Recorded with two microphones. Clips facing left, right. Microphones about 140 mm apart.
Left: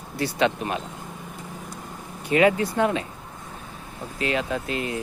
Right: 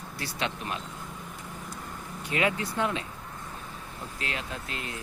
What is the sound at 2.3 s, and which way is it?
Speech, 50° left (ahead or behind).